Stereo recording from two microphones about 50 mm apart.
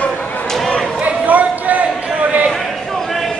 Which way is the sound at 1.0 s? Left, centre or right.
Right.